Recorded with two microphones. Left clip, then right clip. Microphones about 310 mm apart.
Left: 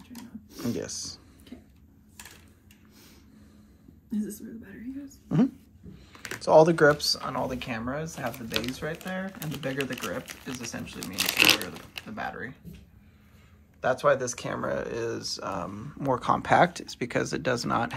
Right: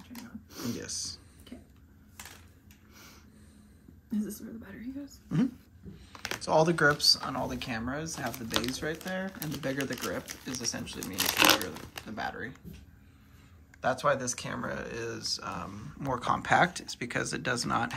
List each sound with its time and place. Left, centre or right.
0.1 s a sound: centre
4.1 s speech: centre
6.1 s computer keyboard: centre
6.4 s speech: centre
13.7 s speech: centre